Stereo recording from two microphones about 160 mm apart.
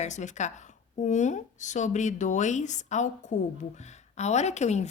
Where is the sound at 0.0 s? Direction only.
50° left (ahead or behind).